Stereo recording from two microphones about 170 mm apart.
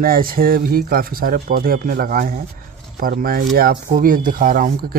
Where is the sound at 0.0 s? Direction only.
60° right (ahead or behind).